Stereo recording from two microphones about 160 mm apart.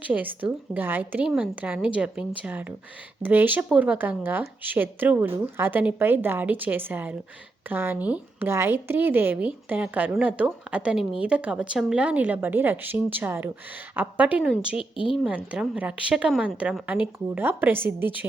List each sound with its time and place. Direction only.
0.1 s a woman's voice: 10° right (ahead or behind)
14.8 s a woman's voice: 35° left (ahead or behind)
15.5 s a woman's voice: 5° right (ahead or behind)